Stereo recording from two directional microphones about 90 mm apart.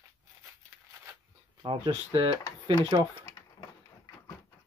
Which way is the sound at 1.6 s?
80° right.